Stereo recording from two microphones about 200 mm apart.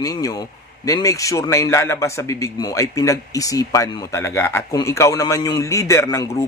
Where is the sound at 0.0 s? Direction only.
20° left (ahead or behind).